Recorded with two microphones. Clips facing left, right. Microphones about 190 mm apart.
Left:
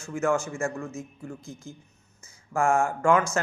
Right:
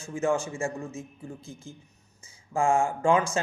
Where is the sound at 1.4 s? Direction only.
55° right (ahead or behind).